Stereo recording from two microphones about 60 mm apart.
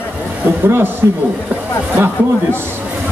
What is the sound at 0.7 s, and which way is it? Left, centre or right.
Speech, right.